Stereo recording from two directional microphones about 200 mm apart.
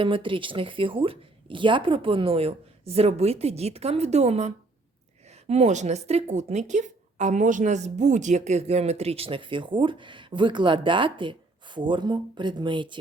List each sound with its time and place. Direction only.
0.0 s a woman's voice: 25° right (ahead or behind)